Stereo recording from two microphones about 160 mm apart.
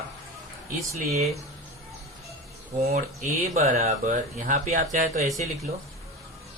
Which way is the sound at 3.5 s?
45° right (ahead or behind).